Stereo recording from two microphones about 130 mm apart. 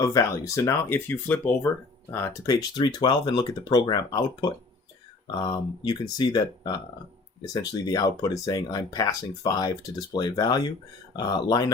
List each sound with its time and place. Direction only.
0.0 s speech: 25° left (ahead or behind)